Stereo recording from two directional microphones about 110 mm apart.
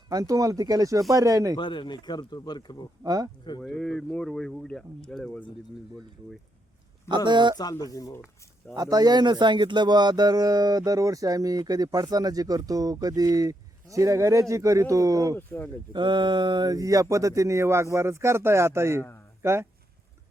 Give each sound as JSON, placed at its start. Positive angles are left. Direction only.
{"t": 0.1, "sound": "speech", "side_deg": -35}
{"t": 1.5, "sound": "speech", "side_deg": 45}
{"t": 3.0, "sound": "speech", "side_deg": -35}
{"t": 3.8, "sound": "speech", "side_deg": 5}
{"t": 7.3, "sound": "speech", "side_deg": -45}
{"t": 7.9, "sound": "speech", "side_deg": 30}
{"t": 8.7, "sound": "speech", "side_deg": -35}
{"t": 15.4, "sound": "speech", "side_deg": 20}
{"t": 15.9, "sound": "speech", "side_deg": -45}